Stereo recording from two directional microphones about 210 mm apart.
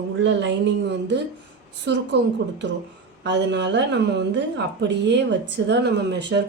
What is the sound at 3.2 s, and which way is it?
Speech, 55° right (ahead or behind).